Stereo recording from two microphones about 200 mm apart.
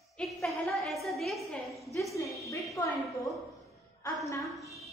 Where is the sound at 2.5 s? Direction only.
15° left (ahead or behind).